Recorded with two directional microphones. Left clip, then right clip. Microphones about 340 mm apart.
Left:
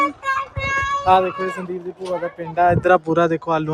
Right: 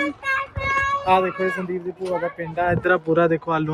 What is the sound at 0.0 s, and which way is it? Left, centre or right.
Child singing, left.